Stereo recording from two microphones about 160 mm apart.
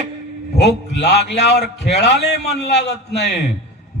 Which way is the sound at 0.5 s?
90° left.